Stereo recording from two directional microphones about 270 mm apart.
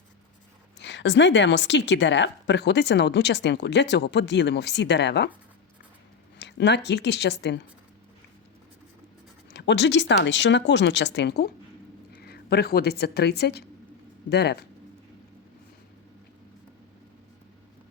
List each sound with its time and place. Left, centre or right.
0.8 s a woman's voice: left
6.4 s speech: left
9.5 s a woman's voice: left